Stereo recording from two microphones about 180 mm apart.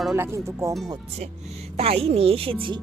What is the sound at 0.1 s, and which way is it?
Speech, 15° right (ahead or behind).